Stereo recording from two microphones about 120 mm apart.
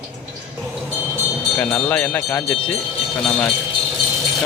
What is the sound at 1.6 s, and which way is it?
Speech, 15° left (ahead or behind).